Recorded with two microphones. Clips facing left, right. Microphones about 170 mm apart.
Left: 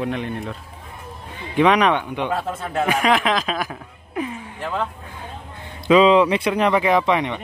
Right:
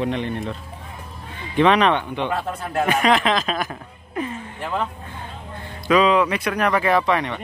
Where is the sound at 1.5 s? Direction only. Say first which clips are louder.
Even; 10° left (ahead or behind).